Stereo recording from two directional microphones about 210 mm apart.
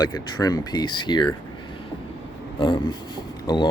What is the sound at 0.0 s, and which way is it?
Speech, 20° left (ahead or behind).